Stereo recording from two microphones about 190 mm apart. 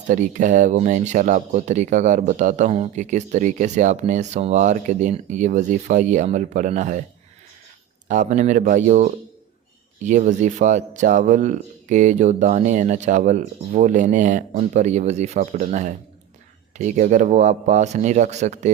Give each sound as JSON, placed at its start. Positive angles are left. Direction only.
{"t": 0.1, "sound": "speech", "side_deg": -40}
{"t": 8.0, "sound": "speech", "side_deg": -40}